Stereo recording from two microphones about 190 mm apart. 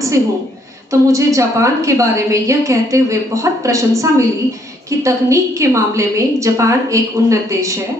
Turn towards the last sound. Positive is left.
turn(degrees=-15)  # may be behind; listen again after turning